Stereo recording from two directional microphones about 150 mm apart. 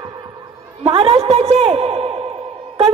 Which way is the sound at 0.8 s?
40° right (ahead or behind).